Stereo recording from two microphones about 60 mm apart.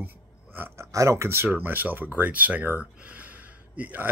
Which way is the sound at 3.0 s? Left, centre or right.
Right.